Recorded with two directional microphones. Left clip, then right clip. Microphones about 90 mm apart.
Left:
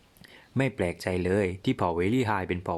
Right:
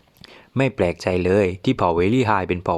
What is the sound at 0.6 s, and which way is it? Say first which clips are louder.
Speech: right 8 dB; 35° right (ahead or behind).